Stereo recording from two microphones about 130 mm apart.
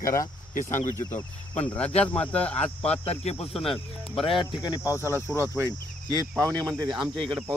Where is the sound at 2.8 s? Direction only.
50° left (ahead or behind).